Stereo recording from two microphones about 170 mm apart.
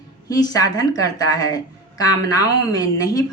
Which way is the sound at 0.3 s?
20° left (ahead or behind).